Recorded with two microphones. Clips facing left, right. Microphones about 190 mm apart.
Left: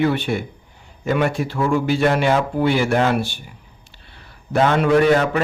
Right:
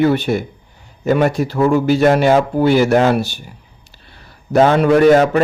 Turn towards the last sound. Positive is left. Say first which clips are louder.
# right 5 dB
turn(degrees=-40)  # may be behind; listen again after turning